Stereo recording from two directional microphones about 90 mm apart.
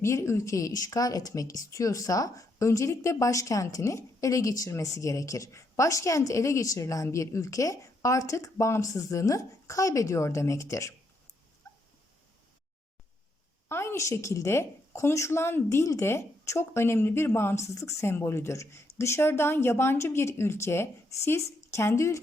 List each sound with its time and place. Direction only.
0.0 s speech: 30° left (ahead or behind)
13.7 s speech: 30° left (ahead or behind)